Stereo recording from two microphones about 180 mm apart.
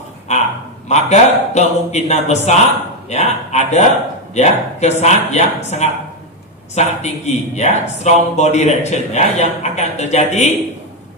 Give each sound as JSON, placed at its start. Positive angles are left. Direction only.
{"t": 0.3, "sound": "a man's voice", "side_deg": 40}